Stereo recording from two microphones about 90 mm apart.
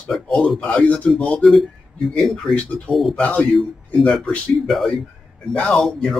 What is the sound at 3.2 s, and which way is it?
A man's voice, 15° left (ahead or behind).